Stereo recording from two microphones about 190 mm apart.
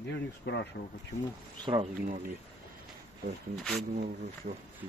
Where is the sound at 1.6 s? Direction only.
30° right (ahead or behind).